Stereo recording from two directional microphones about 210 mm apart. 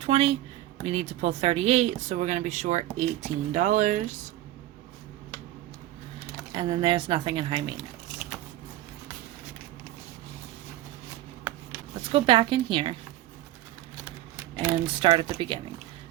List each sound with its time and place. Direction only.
0.0 s speech: 30° right (ahead or behind)
6.5 s speech: 25° right (ahead or behind)
12.1 s speech: 25° right (ahead or behind)
14.5 s speech: 25° right (ahead or behind)